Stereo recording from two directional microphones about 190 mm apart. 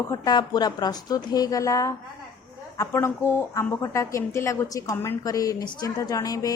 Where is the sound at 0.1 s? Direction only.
20° left (ahead or behind).